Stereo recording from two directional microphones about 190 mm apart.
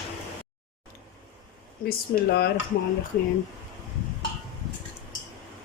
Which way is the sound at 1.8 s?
55° left (ahead or behind).